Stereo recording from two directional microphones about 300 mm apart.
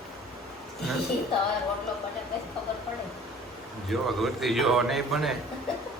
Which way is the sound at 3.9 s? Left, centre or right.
Centre.